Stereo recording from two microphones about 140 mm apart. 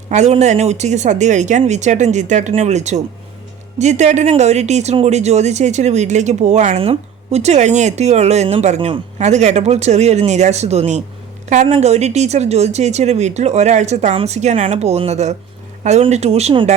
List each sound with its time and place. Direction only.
0.1 s a woman's voice: 55° right (ahead or behind)